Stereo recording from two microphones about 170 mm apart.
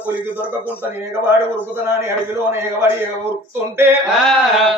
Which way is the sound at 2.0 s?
15° right (ahead or behind).